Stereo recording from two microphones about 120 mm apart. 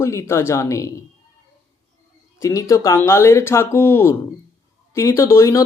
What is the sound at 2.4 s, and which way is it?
Speech, 25° left (ahead or behind).